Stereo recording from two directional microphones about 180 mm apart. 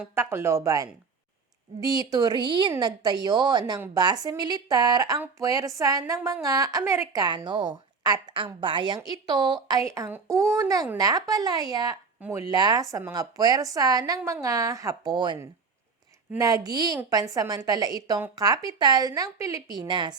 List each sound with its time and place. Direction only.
0.0 s a woman's voice: 15° right (ahead or behind)